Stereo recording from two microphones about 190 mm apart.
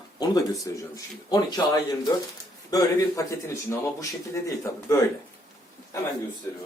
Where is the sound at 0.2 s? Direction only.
20° left (ahead or behind).